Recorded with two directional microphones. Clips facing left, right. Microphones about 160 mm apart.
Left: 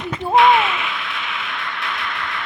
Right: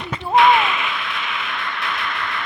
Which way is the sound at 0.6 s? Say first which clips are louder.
Even; 45° right (ahead or behind).